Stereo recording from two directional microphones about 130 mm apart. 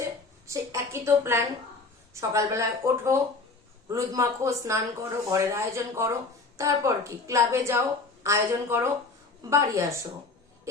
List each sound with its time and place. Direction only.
0.4 s speech: 25° right (ahead or behind)